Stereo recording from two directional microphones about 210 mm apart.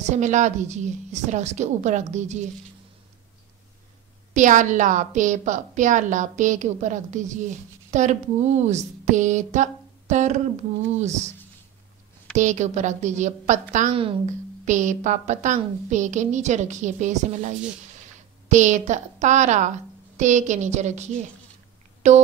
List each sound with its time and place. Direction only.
0.0 s a woman's voice: 35° right (ahead or behind)
4.3 s a woman's voice: 35° right (ahead or behind)
12.4 s a woman's voice: 35° right (ahead or behind)
18.5 s a woman's voice: 35° right (ahead or behind)